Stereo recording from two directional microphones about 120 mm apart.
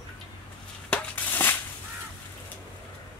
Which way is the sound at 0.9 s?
15° left (ahead or behind).